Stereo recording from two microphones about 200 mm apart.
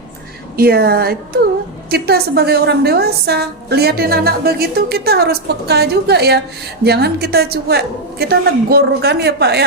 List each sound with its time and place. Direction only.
0.5 s a woman's voice: 50° right (ahead or behind)